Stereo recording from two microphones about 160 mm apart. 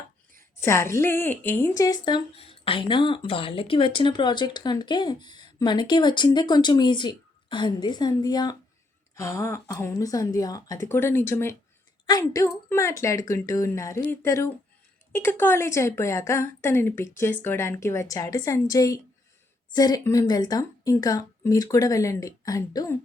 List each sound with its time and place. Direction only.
0.6 s a woman's voice: 15° left (ahead or behind)